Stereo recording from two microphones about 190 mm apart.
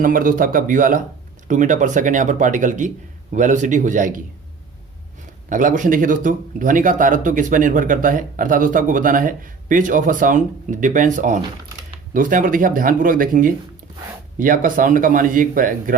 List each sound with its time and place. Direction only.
0.0 s speech: 45° right (ahead or behind)
5.5 s speech: 45° right (ahead or behind)